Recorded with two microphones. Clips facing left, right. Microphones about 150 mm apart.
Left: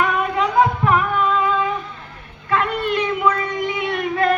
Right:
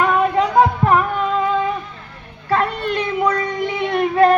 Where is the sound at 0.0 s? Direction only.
40° right (ahead or behind).